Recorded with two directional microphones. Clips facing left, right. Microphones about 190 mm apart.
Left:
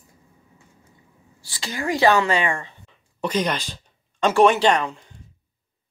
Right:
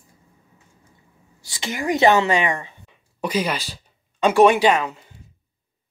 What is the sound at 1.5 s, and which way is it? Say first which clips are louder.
A woman's voice: right 2 dB; 20° right (ahead or behind).